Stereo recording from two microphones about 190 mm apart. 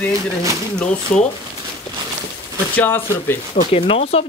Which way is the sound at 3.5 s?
45° left (ahead or behind).